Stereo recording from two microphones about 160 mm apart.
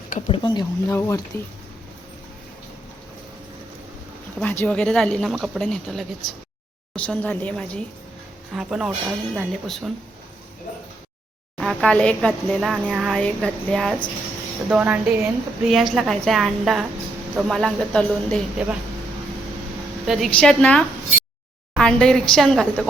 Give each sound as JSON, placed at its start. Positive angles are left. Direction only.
{"t": 0.3, "sound": "speech", "side_deg": 25}
{"t": 0.9, "sound": "a woman's voice", "side_deg": 15}
{"t": 4.4, "sound": "a woman's voice", "side_deg": 10}
{"t": 8.5, "sound": "speech", "side_deg": -5}
{"t": 11.5, "sound": "speech", "side_deg": 0}
{"t": 14.7, "sound": "a woman's voice", "side_deg": -10}
{"t": 15.7, "sound": "speech", "side_deg": 0}
{"t": 20.1, "sound": "a woman's voice", "side_deg": 0}